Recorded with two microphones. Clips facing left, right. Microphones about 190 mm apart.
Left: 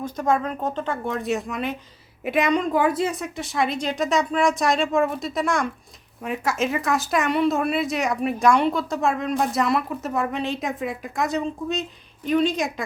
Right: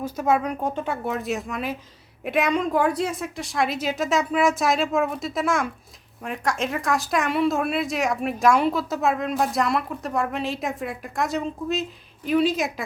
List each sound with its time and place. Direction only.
0.0 s a woman's voice: 5° right (ahead or behind)